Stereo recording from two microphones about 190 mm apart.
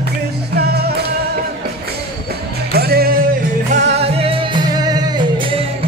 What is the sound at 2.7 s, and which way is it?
Music, 55° right (ahead or behind).